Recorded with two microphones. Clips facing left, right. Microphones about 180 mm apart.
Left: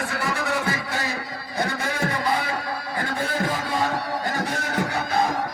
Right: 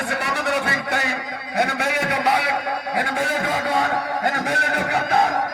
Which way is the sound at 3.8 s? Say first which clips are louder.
Right 4 dB; 65° right (ahead or behind).